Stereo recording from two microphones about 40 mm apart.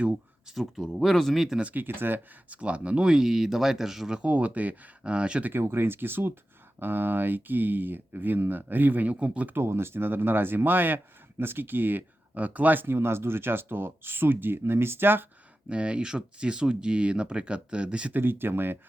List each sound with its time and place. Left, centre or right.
0.5 s speech: centre
1.8 s speech: right
2.5 s speech: right
3.0 s speech: centre
4.2 s speech: right
5.0 s speech: right
5.5 s speech: right
9.1 s speech: right
9.6 s speech: right
12.8 s speech: right
15.7 s speech: right
18.1 s speech: right